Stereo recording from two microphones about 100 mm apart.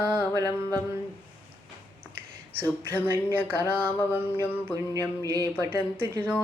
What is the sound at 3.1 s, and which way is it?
Speech, 20° right (ahead or behind).